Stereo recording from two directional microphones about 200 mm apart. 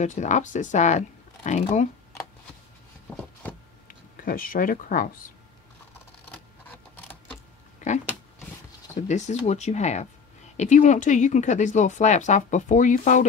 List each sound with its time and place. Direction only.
0.0 s speech: 35° left (ahead or behind)
3.1 s a sound: 5° left (ahead or behind)
3.8 s speech: 45° left (ahead or behind)
8.9 s speech: 35° left (ahead or behind)